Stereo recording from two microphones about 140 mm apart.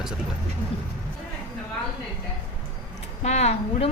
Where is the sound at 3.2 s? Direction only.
50° left (ahead or behind).